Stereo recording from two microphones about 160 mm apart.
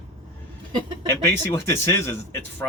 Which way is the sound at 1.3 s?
15° left (ahead or behind).